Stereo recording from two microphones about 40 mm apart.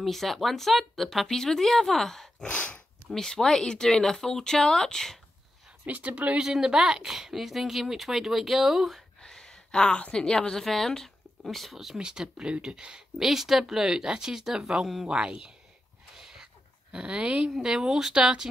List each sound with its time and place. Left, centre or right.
0.0 s speech: centre
2.4 s a sound: left
3.1 s speech: centre
5.9 s speech: right
6.4 s speech: centre
9.2 s a sound: centre
10.1 s speech: centre
10.6 s speech: centre
12.0 s speech: centre
15.0 s speech: right
16.2 s a sound: centre
16.9 s speech: right
17.5 s speech: centre